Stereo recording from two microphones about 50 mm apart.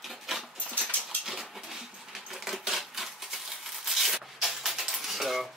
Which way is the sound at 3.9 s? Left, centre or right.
Centre.